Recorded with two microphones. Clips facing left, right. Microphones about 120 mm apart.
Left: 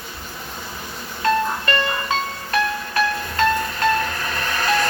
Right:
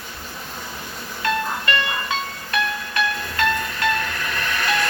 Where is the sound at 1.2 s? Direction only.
35° left (ahead or behind).